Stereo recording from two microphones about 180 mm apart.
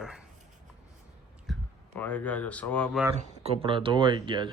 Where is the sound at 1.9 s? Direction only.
10° left (ahead or behind).